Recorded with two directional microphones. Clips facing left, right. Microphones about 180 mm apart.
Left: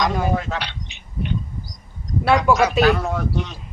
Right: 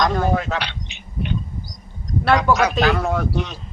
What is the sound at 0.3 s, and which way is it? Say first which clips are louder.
Speech: right 2 dB; 85° right.